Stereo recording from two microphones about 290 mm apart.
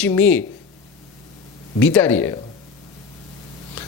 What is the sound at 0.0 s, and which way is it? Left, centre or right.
Speech, centre.